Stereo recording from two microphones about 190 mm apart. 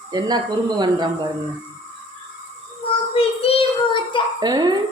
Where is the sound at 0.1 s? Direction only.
20° right (ahead or behind).